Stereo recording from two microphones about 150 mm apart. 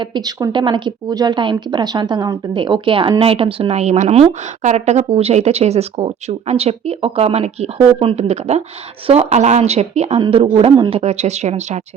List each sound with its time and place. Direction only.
0.0 s a woman's voice: 30° right (ahead or behind); by 10.2 s 45° right (ahead or behind)
10.2 s a woman's voice: 35° right (ahead or behind)